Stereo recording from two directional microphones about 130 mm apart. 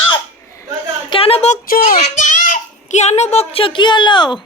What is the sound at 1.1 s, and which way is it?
Speech, 50° left (ahead or behind).